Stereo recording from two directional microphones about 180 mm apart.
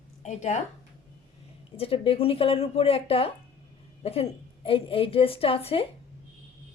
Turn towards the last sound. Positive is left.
turn(degrees=30)  # may be behind; listen again after turning